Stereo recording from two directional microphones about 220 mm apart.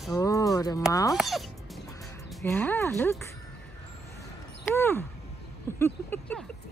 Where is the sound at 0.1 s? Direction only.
15° left (ahead or behind).